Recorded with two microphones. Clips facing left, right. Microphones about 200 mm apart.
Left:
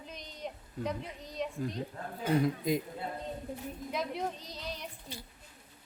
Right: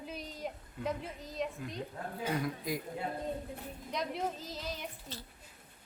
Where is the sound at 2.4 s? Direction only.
25° left (ahead or behind).